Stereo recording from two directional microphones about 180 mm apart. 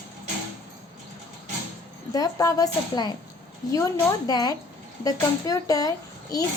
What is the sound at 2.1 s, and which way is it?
A woman's voice, 20° left (ahead or behind).